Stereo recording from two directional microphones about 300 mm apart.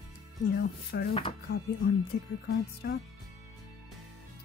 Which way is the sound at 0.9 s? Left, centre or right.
Left.